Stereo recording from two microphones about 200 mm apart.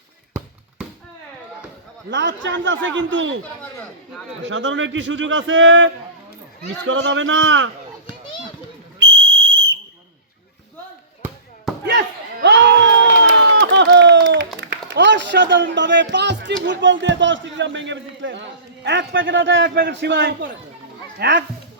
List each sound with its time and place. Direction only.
2.0 s a man's voice: 65° right (ahead or behind)
4.4 s a man's voice: 65° right (ahead or behind)
11.9 s crowd: 60° right (ahead or behind)
16.6 s a man's voice: 65° right (ahead or behind)